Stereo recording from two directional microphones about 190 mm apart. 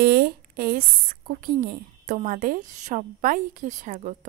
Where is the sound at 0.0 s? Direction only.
55° right (ahead or behind).